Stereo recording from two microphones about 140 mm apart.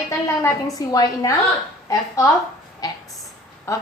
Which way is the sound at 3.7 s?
20° left (ahead or behind).